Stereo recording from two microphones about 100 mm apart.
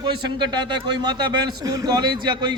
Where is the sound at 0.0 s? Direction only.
50° right (ahead or behind).